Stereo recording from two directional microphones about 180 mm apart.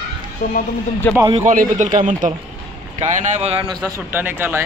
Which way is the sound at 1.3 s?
45° right (ahead or behind).